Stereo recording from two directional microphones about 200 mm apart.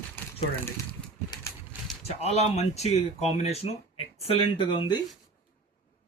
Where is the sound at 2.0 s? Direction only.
30° left (ahead or behind).